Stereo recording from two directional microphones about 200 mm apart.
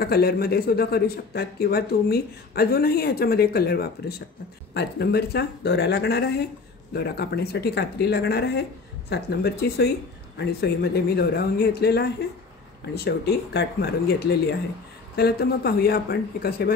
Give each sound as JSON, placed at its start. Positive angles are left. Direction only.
{"t": 0.0, "sound": "a man's voice", "side_deg": 50}